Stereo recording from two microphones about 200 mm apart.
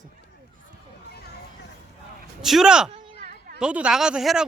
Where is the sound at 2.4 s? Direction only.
Centre (ahead or behind).